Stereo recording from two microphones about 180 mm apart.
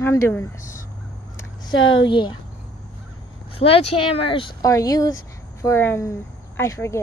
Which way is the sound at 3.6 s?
35° left (ahead or behind).